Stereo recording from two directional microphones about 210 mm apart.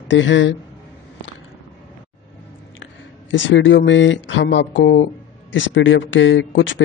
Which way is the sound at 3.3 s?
60° left (ahead or behind).